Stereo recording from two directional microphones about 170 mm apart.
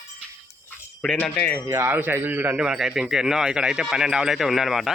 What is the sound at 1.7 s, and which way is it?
A man's voice, 15° right (ahead or behind).